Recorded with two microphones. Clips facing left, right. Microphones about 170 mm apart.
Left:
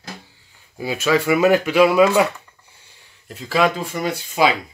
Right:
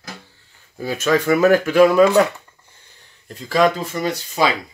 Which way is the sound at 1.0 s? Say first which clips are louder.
Right 1 dB; 10° left (ahead or behind).